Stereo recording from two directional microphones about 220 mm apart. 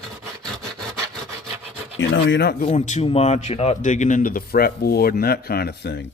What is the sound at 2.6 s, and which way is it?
A man's voice, 30° left (ahead or behind).